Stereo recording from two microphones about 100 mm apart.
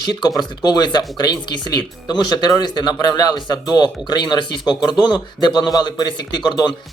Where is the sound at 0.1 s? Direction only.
45° left (ahead or behind).